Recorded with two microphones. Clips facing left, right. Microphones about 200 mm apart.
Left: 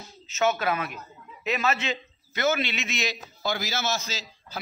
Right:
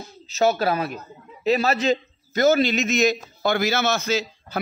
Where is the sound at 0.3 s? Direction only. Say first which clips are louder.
Right 5 dB; 35° right (ahead or behind).